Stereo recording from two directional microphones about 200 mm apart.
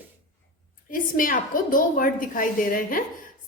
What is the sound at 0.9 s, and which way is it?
A woman's voice, 40° left (ahead or behind).